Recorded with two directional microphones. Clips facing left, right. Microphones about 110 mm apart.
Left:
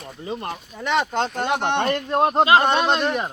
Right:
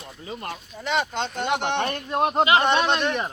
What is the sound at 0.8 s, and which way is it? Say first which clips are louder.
Speech: left 4 dB; 50° left (ahead or behind).